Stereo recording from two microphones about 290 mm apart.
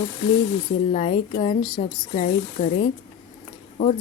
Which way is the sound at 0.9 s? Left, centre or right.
Left.